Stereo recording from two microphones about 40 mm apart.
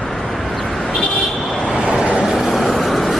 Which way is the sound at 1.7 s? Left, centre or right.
Centre.